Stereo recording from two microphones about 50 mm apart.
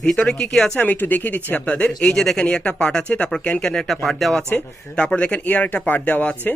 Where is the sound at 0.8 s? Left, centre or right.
Left; by 2.2 s centre.